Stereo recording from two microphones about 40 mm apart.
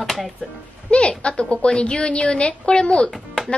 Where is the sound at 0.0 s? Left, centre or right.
Centre.